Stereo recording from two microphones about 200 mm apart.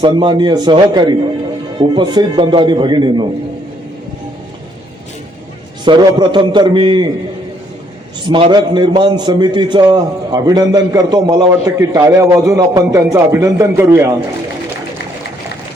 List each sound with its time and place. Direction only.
0.0 s a man's voice: 25° right (ahead or behind)
5.8 s a man's voice: 20° right (ahead or behind)
8.3 s a man's voice: 25° right (ahead or behind)